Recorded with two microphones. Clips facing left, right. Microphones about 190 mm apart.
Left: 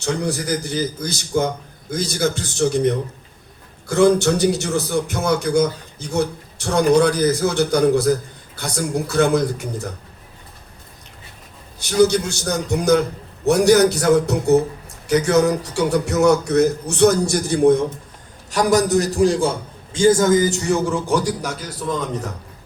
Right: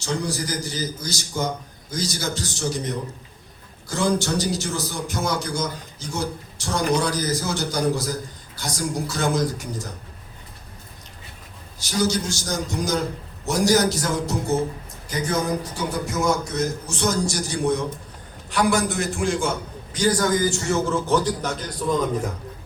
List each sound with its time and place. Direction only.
0.0 s a man's voice: 60° left (ahead or behind)
11.8 s a man's voice: 60° left (ahead or behind)
15.0 s speech: 75° left (ahead or behind); by 17.8 s 55° left (ahead or behind)
18.5 s a man's voice: 40° left (ahead or behind); by 21.9 s 5° left (ahead or behind)